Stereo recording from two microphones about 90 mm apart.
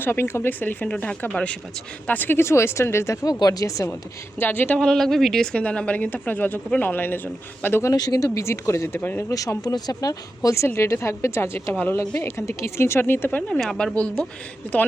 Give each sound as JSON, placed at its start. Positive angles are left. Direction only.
{"t": 0.0, "sound": "speech", "side_deg": 25}
{"t": 3.4, "sound": "speech", "side_deg": 40}
{"t": 4.4, "sound": "speech", "side_deg": 20}
{"t": 4.8, "sound": "speech", "side_deg": 5}
{"t": 7.9, "sound": "speech", "side_deg": 45}
{"t": 9.3, "sound": "speech", "side_deg": 40}
{"t": 13.5, "sound": "speech", "side_deg": 5}